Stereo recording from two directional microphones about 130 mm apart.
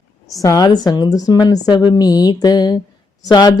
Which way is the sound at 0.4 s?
30° left (ahead or behind).